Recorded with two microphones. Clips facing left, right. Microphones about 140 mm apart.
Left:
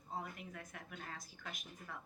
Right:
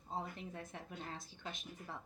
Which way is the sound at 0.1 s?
25° right (ahead or behind).